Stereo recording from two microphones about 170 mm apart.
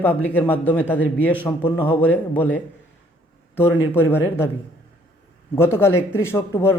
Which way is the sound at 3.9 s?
15° left (ahead or behind).